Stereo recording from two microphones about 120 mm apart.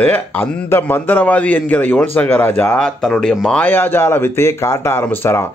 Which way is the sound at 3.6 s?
15° left (ahead or behind).